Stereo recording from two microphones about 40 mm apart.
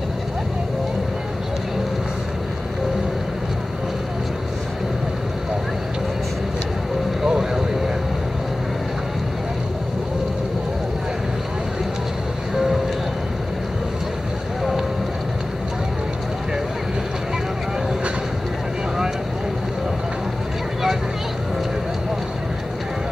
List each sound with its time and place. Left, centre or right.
7.2 s vehicle: centre